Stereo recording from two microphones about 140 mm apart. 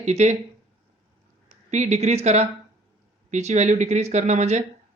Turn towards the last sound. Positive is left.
turn(degrees=-55)  # may be behind; listen again after turning